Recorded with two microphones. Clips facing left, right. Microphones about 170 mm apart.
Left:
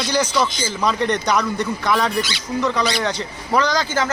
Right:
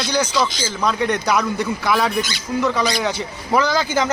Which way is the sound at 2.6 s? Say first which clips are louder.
Right 1 dB; 5° right (ahead or behind).